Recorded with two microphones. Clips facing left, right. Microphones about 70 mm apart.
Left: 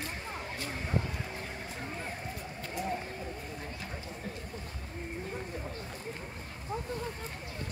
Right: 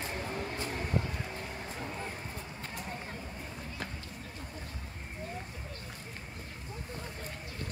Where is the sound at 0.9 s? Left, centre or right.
Centre.